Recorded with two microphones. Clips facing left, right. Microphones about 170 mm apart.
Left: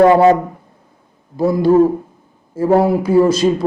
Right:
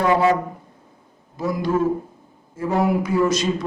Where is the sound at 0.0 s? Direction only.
35° left (ahead or behind).